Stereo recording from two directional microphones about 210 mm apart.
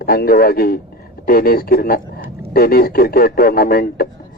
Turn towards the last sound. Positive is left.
turn(degrees=45)  # may be behind; listen again after turning